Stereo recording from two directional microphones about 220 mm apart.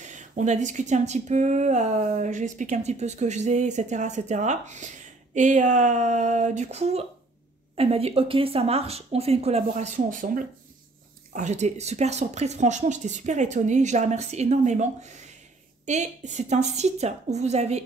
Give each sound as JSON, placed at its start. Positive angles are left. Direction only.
{"t": 0.0, "sound": "speech", "side_deg": -35}